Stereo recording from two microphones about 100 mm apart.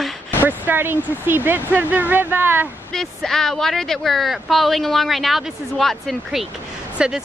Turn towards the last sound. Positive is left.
turn(degrees=-10)  # may be behind; listen again after turning